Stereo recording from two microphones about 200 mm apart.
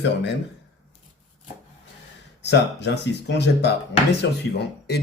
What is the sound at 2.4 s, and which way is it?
Speech, 60° left (ahead or behind).